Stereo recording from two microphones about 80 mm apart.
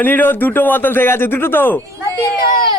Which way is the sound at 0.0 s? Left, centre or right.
Left.